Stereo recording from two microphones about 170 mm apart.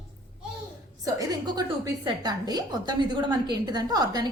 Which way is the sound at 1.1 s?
25° right (ahead or behind).